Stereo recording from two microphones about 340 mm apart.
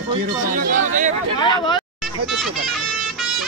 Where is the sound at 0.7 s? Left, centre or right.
Right.